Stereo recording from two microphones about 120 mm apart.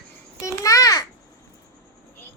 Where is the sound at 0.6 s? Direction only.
30° left (ahead or behind).